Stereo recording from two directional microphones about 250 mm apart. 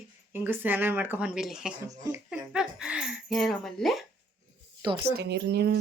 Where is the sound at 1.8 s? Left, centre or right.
Centre.